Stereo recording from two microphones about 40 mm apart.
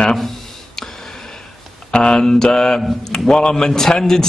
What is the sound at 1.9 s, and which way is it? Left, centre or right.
Speech, left.